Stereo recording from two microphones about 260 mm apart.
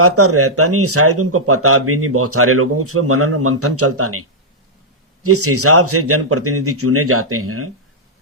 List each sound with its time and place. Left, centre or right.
0.0 s speech: right
5.2 s speech: right